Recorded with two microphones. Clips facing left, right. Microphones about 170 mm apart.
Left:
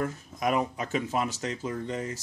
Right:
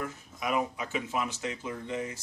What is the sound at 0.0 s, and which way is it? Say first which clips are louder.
Speech: left 6 dB; 45° left (ahead or behind).